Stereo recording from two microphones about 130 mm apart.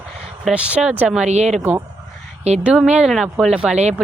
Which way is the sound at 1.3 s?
55° right (ahead or behind).